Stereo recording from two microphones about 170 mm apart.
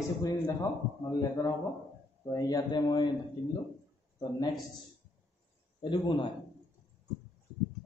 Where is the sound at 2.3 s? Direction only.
20° left (ahead or behind).